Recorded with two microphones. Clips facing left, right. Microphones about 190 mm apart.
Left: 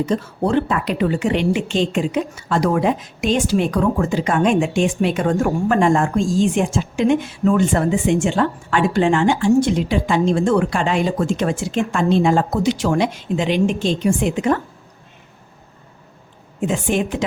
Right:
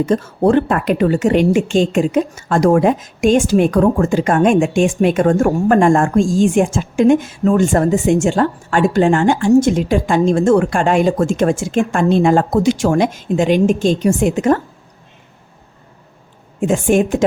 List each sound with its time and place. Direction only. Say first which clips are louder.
0.0 s a woman's voice: right 6 dB; 50° right (ahead or behind)
16.6 s a woman's voice: right 6 dB; 45° right (ahead or behind)